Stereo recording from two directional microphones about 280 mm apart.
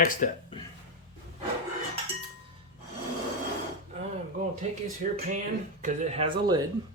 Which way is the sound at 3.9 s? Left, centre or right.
Right.